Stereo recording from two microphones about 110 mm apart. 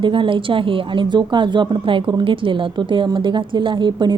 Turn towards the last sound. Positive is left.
turn(degrees=-45)  # may be behind; listen again after turning